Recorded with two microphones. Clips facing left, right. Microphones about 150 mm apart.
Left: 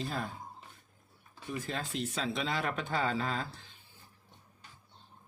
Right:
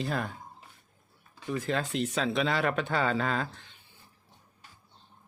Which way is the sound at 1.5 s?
80° right.